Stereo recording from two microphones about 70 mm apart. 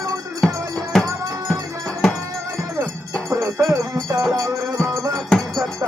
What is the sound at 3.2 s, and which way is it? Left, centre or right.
Music, right.